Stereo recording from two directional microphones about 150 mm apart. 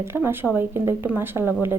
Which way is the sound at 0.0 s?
15° right (ahead or behind).